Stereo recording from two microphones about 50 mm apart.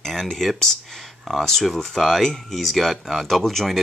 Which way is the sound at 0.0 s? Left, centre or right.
Centre.